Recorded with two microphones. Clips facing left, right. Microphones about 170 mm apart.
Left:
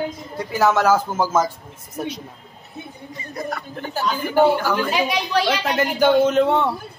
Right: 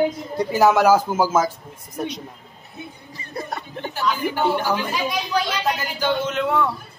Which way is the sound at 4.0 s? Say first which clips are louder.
Left 4 dB; 45° left (ahead or behind).